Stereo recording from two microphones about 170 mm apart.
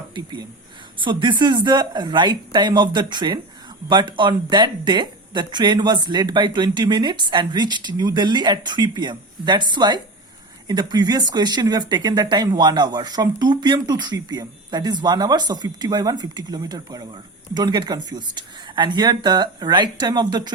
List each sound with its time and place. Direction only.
0.1 s speech: 25° right (ahead or behind)